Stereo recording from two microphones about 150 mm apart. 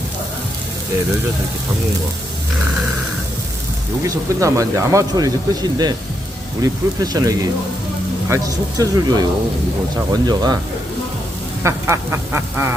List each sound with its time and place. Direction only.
4.0 s speech: 20° right (ahead or behind)
11.6 s duck: 15° right (ahead or behind)